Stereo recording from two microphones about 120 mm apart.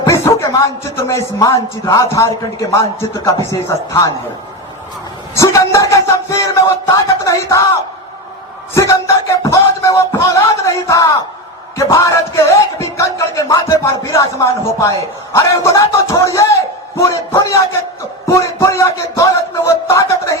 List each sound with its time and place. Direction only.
0.1 s music: 25° left (ahead or behind)
5.4 s speech: 25° left (ahead or behind)
8.7 s music: 25° left (ahead or behind)